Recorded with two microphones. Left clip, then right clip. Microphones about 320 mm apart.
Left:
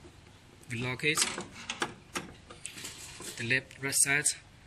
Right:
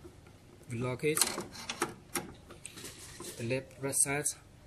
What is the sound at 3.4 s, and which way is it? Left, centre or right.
Speech, centre.